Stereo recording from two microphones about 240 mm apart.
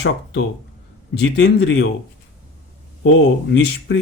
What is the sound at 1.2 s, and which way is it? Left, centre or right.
Speech, left.